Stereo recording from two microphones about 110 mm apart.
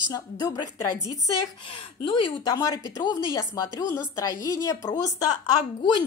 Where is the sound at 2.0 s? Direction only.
55° left (ahead or behind).